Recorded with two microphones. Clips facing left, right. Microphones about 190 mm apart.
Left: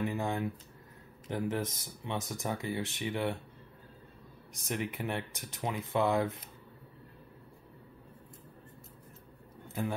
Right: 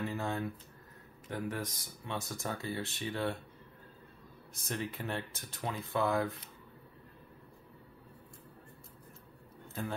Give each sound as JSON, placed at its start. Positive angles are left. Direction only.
{"t": 0.0, "sound": "a sound", "side_deg": 15}
{"t": 1.3, "sound": "speech", "side_deg": 25}
{"t": 4.6, "sound": "speech", "side_deg": 15}